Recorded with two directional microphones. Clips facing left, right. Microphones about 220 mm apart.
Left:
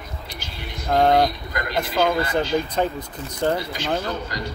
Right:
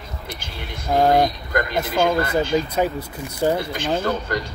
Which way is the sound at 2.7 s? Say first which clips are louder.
Right 2 dB; 10° right (ahead or behind).